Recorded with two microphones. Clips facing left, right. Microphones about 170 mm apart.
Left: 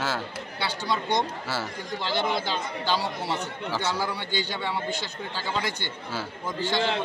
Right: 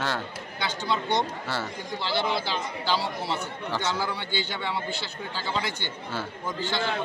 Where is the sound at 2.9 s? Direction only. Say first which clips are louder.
Even; 15° left (ahead or behind).